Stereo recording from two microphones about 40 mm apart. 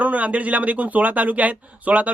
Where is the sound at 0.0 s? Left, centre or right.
Right.